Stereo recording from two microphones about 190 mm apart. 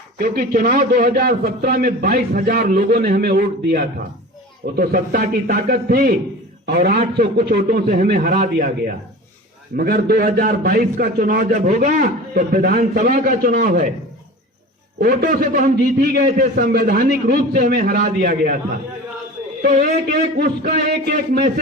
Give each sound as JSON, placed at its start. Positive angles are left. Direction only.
{"t": 0.2, "sound": "a man's voice", "side_deg": -50}
{"t": 15.0, "sound": "a man's voice", "side_deg": -45}
{"t": 19.6, "sound": "a man's voice", "side_deg": -40}